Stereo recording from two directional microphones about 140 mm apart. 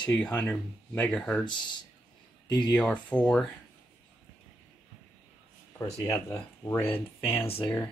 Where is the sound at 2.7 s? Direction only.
10° left (ahead or behind).